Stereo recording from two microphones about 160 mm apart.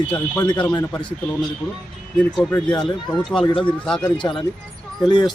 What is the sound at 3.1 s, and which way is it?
A man's voice, 5° left (ahead or behind).